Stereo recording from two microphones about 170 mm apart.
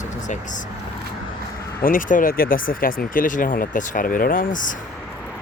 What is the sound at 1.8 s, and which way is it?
Speech, 55° left (ahead or behind).